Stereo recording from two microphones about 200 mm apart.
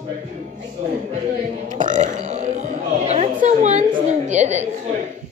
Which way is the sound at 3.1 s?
35° right (ahead or behind).